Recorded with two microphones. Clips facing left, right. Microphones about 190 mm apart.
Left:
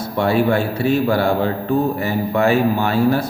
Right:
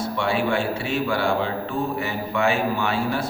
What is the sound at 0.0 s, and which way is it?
A man's voice, 40° left (ahead or behind).